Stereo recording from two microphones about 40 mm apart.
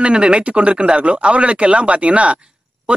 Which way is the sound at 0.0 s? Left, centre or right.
Right.